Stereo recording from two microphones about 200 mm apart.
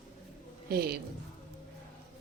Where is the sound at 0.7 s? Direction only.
50° right (ahead or behind).